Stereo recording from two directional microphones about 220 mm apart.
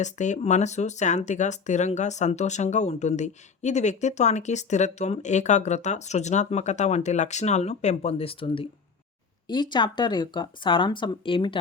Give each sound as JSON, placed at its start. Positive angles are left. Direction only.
{"t": 0.0, "sound": "speech", "side_deg": 35}